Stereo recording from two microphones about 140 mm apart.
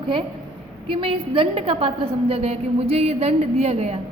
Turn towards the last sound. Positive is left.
turn(degrees=-50)  # may be behind; listen again after turning